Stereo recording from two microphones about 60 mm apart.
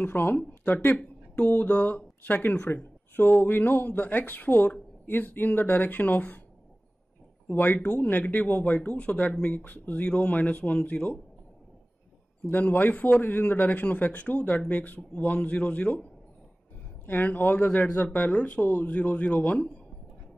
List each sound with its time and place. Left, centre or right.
0.0 s speech: left
7.5 s speech: left
9.6 s speech: left
12.4 s speech: left
17.0 s speech: left